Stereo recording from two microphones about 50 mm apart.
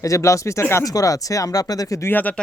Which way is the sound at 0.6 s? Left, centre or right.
Left.